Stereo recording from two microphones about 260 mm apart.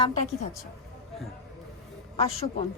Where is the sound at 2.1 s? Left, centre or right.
Left.